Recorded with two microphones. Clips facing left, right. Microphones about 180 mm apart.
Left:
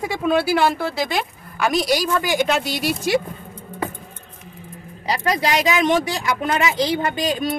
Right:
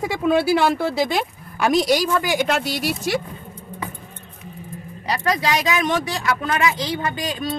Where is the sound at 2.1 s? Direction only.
5° right (ahead or behind).